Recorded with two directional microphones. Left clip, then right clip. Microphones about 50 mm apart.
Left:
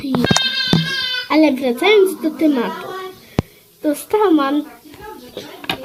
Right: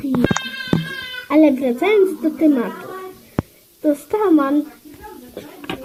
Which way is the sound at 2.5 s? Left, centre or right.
Centre.